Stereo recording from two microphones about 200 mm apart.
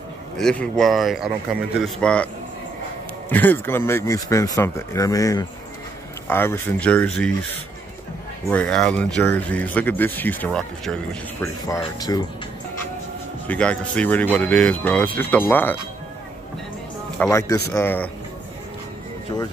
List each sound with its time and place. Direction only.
0.4 s a man's voice: 5° left (ahead or behind)
3.3 s speech: 10° left (ahead or behind)
8.5 s speech: 5° left (ahead or behind)
11.4 s speech: 15° left (ahead or behind)
13.5 s speech: 5° left (ahead or behind)
17.2 s speech: 15° left (ahead or behind)